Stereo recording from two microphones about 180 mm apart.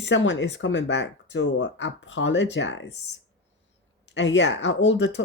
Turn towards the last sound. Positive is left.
turn(degrees=85)